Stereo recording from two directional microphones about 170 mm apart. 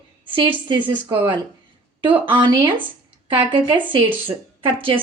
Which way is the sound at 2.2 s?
25° right (ahead or behind).